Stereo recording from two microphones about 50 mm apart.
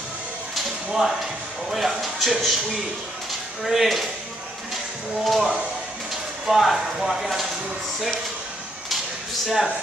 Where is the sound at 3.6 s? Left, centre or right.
Centre.